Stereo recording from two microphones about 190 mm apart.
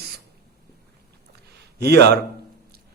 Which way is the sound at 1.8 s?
60° right (ahead or behind).